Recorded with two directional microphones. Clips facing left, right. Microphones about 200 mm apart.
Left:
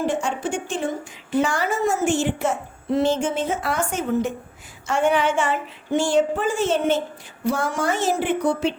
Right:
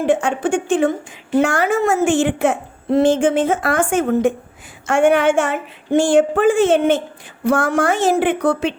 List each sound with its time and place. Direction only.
0.0 s a woman's voice: 55° right (ahead or behind)